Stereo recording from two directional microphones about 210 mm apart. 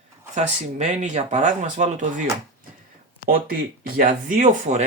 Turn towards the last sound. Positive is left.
turn(degrees=-35)  # may be behind; listen again after turning